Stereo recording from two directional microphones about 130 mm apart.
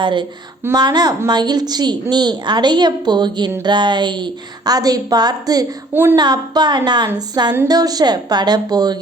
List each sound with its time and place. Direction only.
0.0 s a woman's voice: 40° right (ahead or behind)
5.9 s speech: 15° right (ahead or behind)
6.1 s a woman's voice: 30° right (ahead or behind)